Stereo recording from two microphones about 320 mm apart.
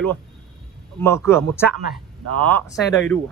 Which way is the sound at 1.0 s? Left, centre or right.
Centre.